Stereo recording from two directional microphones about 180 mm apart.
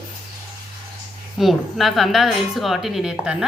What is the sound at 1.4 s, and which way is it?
A woman's voice, centre (ahead or behind).